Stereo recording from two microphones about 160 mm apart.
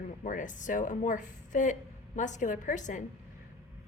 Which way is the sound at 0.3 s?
55° left (ahead or behind).